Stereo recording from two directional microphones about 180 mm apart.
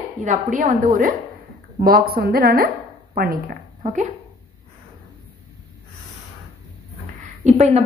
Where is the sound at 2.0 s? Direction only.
60° right (ahead or behind).